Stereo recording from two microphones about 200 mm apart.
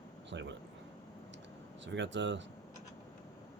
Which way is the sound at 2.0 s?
65° right (ahead or behind).